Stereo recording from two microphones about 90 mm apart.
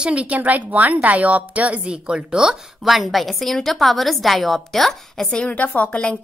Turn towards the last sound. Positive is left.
turn(degrees=15)  # may be behind; listen again after turning